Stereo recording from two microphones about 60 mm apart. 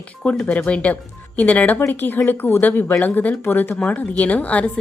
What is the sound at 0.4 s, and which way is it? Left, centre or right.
Speech, left.